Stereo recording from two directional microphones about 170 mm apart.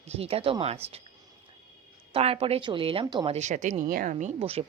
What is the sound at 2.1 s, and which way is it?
Speech, 35° right (ahead or behind).